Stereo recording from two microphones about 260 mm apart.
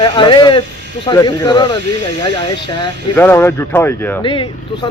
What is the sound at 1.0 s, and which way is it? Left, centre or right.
Speech, centre.